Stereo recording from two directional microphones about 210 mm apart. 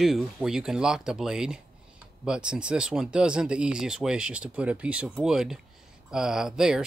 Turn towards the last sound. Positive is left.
turn(degrees=-5)  # may be behind; listen again after turning